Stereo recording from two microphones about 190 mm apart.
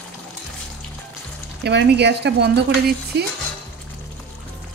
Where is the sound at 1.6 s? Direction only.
65° right (ahead or behind).